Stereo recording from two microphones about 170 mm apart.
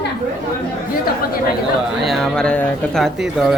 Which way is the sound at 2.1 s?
5° left (ahead or behind).